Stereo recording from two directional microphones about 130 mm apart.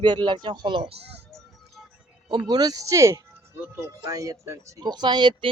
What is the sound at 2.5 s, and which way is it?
Speech, 30° right (ahead or behind).